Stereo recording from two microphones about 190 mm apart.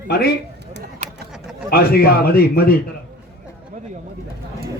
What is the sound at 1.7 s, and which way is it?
A man's voice, 50° left (ahead or behind).